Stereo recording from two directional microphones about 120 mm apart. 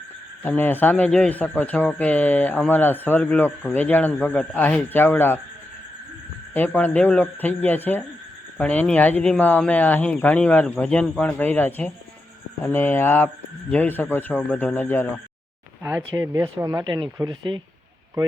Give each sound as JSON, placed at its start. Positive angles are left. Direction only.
{"t": 0.4, "sound": "a man's voice", "side_deg": 15}
{"t": 6.5, "sound": "a man's voice", "side_deg": 15}
{"t": 15.8, "sound": "speech", "side_deg": -15}
{"t": 16.8, "sound": "speech", "side_deg": -40}